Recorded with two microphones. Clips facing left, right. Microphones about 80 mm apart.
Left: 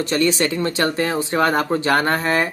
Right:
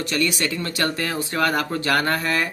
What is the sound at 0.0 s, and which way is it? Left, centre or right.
Speech, left.